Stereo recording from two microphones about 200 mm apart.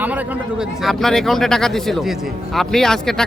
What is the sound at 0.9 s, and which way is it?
Speech, centre (ahead or behind).